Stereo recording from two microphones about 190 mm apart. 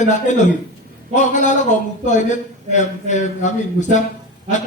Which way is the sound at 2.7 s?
40° left (ahead or behind).